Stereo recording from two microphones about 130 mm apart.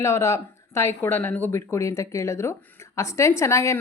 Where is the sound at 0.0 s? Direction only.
25° left (ahead or behind).